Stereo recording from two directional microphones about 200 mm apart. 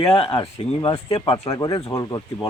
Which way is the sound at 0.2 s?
25° left (ahead or behind).